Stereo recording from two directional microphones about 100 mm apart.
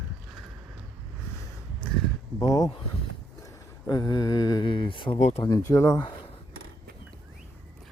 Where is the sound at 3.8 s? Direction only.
40° left (ahead or behind).